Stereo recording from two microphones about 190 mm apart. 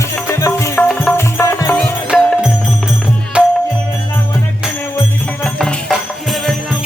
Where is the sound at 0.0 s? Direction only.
15° left (ahead or behind).